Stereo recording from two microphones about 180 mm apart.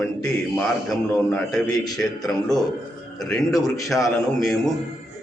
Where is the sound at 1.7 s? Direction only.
20° left (ahead or behind).